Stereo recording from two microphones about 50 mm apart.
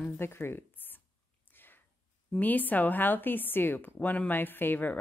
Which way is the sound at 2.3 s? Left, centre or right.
Left.